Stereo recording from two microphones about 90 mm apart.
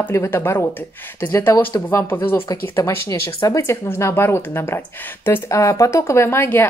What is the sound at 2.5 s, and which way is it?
Speech, 35° left (ahead or behind).